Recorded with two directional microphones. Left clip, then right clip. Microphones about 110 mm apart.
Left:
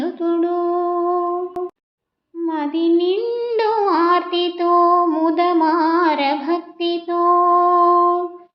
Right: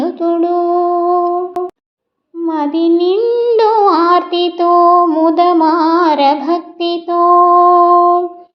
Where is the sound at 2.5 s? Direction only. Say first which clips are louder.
Right 5 dB; 40° right (ahead or behind).